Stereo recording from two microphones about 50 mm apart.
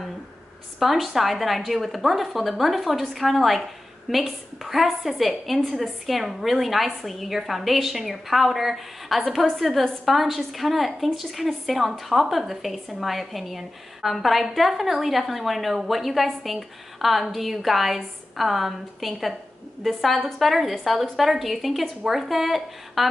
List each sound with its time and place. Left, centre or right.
0.7 s speech: centre